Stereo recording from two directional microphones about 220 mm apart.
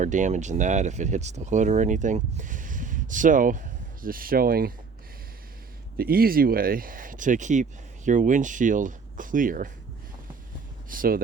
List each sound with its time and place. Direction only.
0.0 s speech: 35° right (ahead or behind)
6.0 s speech: 40° right (ahead or behind)
10.8 s speech: 40° right (ahead or behind)